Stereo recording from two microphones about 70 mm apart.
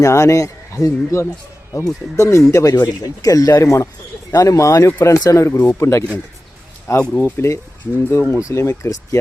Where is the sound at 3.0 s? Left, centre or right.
Left.